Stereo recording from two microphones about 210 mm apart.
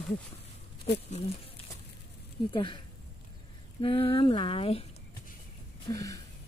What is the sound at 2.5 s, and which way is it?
Speech, 25° left (ahead or behind).